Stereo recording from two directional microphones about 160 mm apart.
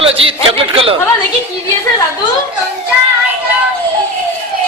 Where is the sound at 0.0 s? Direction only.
35° right (ahead or behind).